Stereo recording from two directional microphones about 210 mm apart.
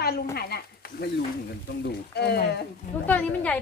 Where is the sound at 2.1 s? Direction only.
50° left (ahead or behind).